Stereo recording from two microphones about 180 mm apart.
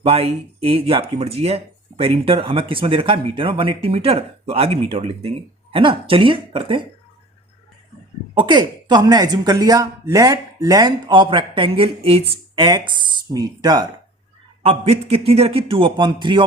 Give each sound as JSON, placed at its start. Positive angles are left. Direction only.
{"t": 0.0, "sound": "speech", "side_deg": -35}
{"t": 8.4, "sound": "speech", "side_deg": -25}
{"t": 14.6, "sound": "speech", "side_deg": -35}